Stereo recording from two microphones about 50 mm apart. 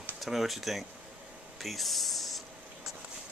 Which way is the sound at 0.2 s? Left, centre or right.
Centre.